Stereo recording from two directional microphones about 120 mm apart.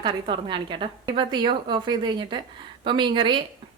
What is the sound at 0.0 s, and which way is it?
A woman's voice, 45° right (ahead or behind).